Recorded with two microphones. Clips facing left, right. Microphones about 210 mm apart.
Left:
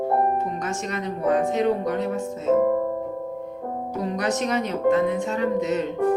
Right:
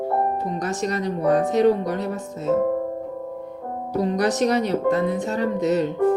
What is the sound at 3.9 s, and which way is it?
Speech, 35° right (ahead or behind).